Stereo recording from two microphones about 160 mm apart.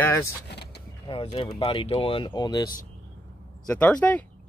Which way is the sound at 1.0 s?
35° left (ahead or behind).